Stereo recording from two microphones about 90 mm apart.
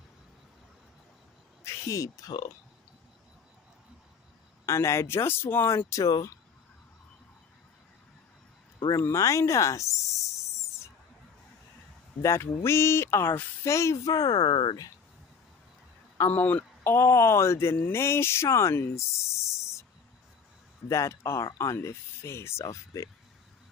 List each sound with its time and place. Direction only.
1.6 s speech: 35° left (ahead or behind)
4.6 s speech: 35° left (ahead or behind)
8.9 s speech: 35° left (ahead or behind)
12.2 s speech: 30° left (ahead or behind); by 14.5 s 45° left (ahead or behind)
14.5 s speech: 65° left (ahead or behind)
16.2 s a man's voice: 20° left (ahead or behind)
16.9 s speech: 30° left (ahead or behind)
20.9 s speech: 35° left (ahead or behind)